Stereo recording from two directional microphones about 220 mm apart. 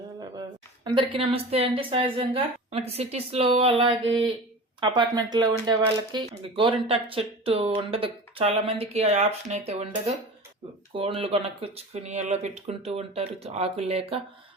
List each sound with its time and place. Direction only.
0.9 s a woman's voice: 25° right (ahead or behind)